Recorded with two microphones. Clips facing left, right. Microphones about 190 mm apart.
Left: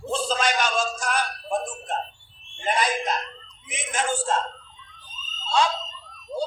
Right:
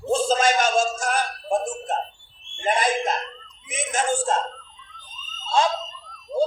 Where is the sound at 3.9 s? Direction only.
45° right (ahead or behind).